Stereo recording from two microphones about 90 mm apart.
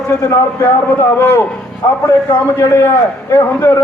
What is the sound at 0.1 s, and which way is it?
A man's voice, 30° left (ahead or behind).